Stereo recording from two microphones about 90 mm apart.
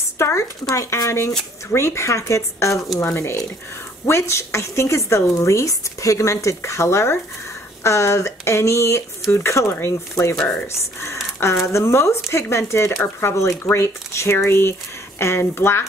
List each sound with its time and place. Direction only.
0.2 s a woman's voice: 35° left (ahead or behind)